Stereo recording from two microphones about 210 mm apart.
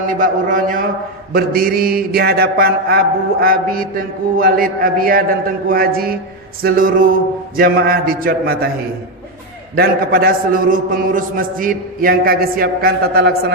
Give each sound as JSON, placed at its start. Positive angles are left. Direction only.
{"t": 0.1, "sound": "a man's voice", "side_deg": -40}
{"t": 9.7, "sound": "a man's voice", "side_deg": -45}